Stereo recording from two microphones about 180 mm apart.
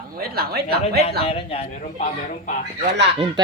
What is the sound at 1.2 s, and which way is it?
Speech, 35° left (ahead or behind).